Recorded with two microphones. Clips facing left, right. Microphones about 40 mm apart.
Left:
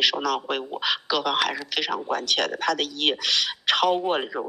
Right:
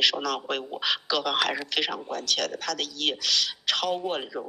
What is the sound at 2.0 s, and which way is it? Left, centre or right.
Speech, left.